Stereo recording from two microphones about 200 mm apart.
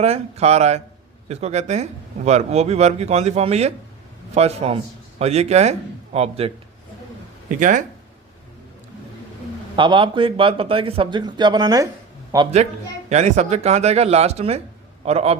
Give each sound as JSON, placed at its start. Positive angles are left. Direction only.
{"t": 0.0, "sound": "speech", "side_deg": -30}
{"t": 7.6, "sound": "speech", "side_deg": -40}
{"t": 9.7, "sound": "speech", "side_deg": -25}
{"t": 13.1, "sound": "speech", "side_deg": -35}